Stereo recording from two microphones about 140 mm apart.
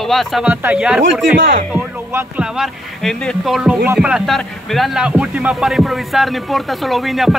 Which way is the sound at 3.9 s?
10° right (ahead or behind).